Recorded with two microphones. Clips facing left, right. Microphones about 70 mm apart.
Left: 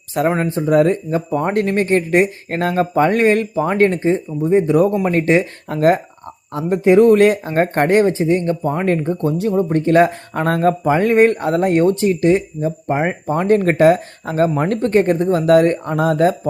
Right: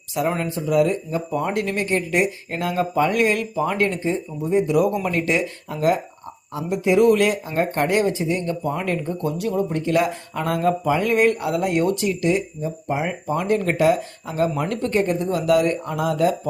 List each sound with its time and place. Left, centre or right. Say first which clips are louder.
0.1 s speech: left 6 dB; left
5.6 s speech: left 6 dB; left